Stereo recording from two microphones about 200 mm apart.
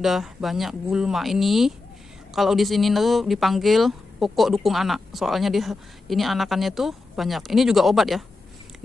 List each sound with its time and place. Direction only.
0.0 s speech: centre (ahead or behind)